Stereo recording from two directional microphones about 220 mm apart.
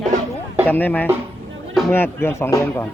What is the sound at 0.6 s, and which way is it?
Speech, 10° left (ahead or behind).